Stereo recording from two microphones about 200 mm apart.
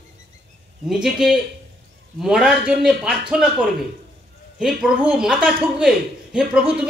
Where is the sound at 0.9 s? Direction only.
Centre (ahead or behind).